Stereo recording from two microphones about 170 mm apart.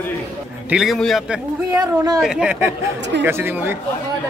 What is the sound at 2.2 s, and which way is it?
A man's voice, 5° right (ahead or behind).